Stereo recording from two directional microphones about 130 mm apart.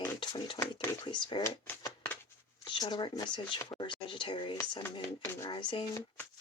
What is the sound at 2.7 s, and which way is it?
Speech, 35° left (ahead or behind).